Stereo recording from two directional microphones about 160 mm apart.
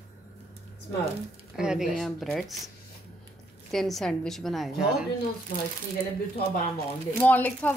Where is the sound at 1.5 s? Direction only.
5° right (ahead or behind).